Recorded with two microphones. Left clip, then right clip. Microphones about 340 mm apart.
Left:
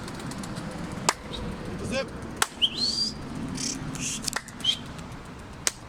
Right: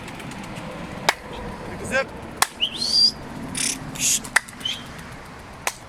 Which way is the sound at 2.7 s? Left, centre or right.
Centre.